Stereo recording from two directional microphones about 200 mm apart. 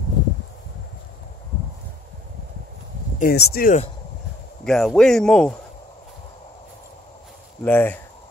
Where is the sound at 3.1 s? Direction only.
45° left (ahead or behind).